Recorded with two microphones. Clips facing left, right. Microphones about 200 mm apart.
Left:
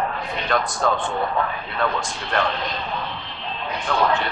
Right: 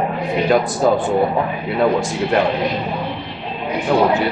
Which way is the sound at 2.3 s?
10° right (ahead or behind).